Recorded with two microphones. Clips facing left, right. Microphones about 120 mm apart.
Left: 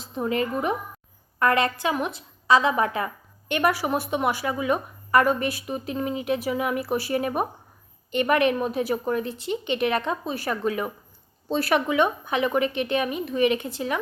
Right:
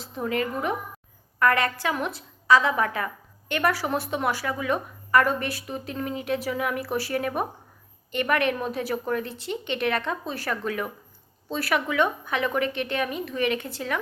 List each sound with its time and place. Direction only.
0.0 s a woman's voice: 20° left (ahead or behind)